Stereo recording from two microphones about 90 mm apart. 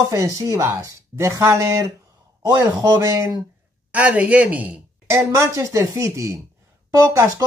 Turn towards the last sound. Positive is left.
turn(degrees=-35)  # may be behind; listen again after turning